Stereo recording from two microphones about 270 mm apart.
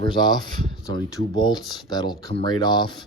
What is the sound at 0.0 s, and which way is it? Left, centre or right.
A man's voice, centre.